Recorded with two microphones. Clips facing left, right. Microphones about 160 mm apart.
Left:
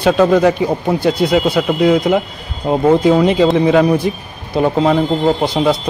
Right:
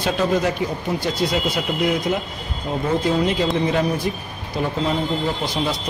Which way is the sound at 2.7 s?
70° left (ahead or behind).